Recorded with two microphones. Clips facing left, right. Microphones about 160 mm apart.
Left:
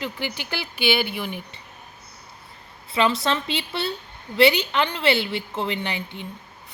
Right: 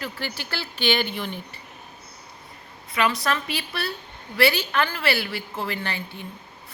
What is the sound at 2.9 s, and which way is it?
A woman's voice, 25° left (ahead or behind).